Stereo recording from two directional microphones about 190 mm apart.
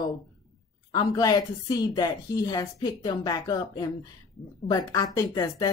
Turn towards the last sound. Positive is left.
turn(degrees=15)  # may be behind; listen again after turning